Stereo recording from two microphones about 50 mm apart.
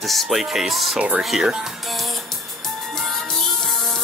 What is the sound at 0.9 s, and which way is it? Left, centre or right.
Speech, centre.